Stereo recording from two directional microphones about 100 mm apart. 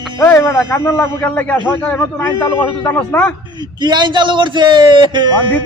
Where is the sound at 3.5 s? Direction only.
50° right (ahead or behind).